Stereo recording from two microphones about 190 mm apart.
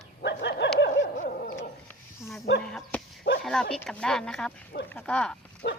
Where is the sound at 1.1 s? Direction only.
50° left (ahead or behind).